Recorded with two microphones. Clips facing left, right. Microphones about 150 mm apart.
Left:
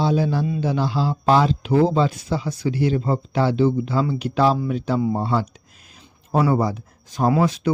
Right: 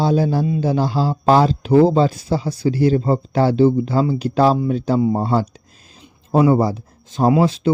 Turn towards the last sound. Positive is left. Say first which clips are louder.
# right 4 dB
turn(degrees=-30)  # may be behind; listen again after turning